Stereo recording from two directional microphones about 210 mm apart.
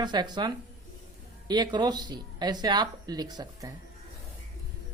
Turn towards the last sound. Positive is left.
turn(degrees=-20)  # may be behind; listen again after turning